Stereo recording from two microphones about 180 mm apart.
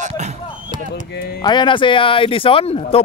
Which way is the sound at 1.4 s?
25° left (ahead or behind).